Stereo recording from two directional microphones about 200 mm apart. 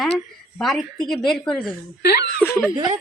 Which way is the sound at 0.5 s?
Centre (ahead or behind).